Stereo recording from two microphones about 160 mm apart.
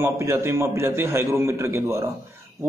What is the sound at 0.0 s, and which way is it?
A man's voice, 15° right (ahead or behind).